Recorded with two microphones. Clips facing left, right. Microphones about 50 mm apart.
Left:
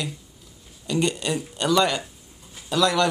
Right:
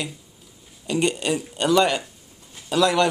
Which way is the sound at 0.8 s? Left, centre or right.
Centre.